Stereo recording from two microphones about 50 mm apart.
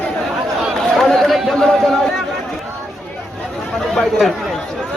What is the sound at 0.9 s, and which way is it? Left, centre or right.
Chatter, centre.